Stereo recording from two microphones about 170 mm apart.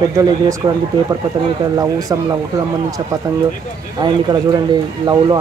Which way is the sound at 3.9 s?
25° right (ahead or behind).